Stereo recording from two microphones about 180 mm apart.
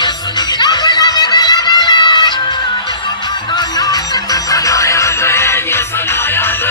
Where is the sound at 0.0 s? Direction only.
25° left (ahead or behind).